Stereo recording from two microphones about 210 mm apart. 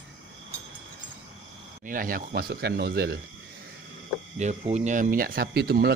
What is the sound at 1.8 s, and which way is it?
Speech, 40° right (ahead or behind).